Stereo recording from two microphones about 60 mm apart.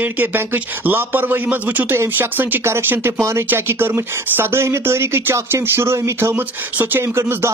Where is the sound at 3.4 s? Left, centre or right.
Right.